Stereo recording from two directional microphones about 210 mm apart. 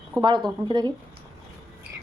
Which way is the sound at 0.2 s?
20° right (ahead or behind).